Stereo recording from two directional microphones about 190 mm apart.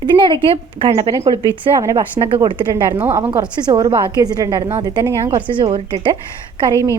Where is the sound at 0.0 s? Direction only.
25° right (ahead or behind).